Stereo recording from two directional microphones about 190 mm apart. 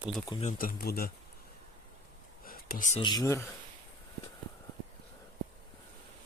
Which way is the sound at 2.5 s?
45° left (ahead or behind).